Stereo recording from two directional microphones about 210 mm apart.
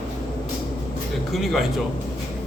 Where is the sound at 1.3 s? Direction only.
Centre (ahead or behind).